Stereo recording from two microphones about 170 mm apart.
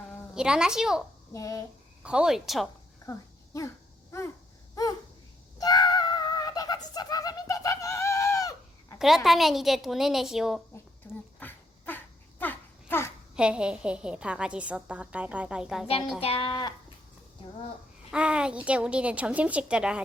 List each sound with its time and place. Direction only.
0.3 s a woman's voice: 5° right (ahead or behind)
1.3 s speech: 20° left (ahead or behind)
2.0 s a woman's voice: 5° right (ahead or behind)
3.1 s a sound: 20° left (ahead or behind)
4.7 s a sound: 20° left (ahead or behind)
9.0 s a woman's voice: centre (ahead or behind)
11.3 s babbling: 10° left (ahead or behind)
13.3 s a woman's voice: 5° right (ahead or behind)
16.2 s speech: 30° left (ahead or behind)
18.1 s speech: 5° right (ahead or behind)